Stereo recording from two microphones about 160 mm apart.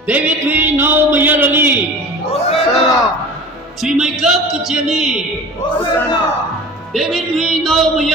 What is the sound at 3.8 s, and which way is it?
A man's voice, 5° right (ahead or behind).